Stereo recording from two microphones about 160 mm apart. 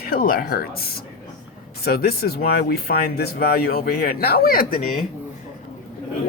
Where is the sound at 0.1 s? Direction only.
65° left (ahead or behind).